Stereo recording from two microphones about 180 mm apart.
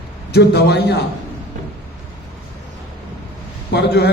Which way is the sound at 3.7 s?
65° left (ahead or behind).